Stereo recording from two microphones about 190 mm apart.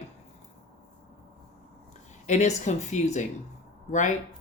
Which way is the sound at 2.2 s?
40° left (ahead or behind).